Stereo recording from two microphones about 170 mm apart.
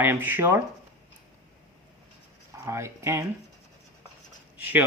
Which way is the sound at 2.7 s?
15° right (ahead or behind).